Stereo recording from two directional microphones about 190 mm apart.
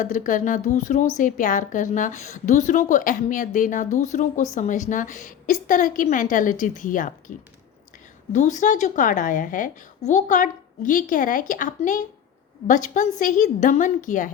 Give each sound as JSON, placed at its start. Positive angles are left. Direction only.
{"t": 0.0, "sound": "a woman's voice", "side_deg": 45}